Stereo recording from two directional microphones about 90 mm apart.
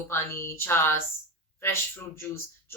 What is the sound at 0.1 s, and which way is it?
A woman's voice, 30° left (ahead or behind).